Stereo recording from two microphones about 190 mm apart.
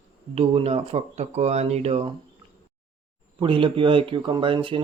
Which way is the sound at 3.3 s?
25° right (ahead or behind).